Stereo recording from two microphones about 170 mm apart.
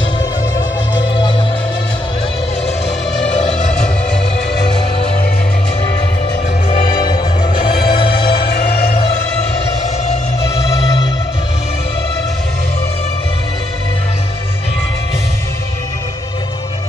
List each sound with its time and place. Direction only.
3.3 s music: 45° left (ahead or behind)
7.1 s music: 30° left (ahead or behind)
8.5 s music: 65° left (ahead or behind)